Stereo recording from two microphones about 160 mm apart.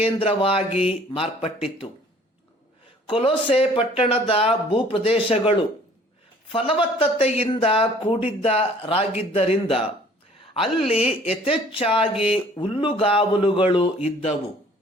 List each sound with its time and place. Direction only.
0.0 s speech: 35° left (ahead or behind)
3.1 s speech: 35° left (ahead or behind)